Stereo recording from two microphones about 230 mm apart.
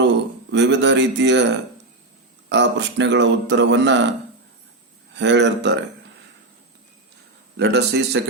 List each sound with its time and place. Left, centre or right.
0.5 s speech: right
2.5 s speech: right
5.1 s speech: right
7.5 s speech: right